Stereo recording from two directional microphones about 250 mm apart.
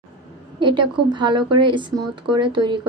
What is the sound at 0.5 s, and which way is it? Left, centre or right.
Speech, centre.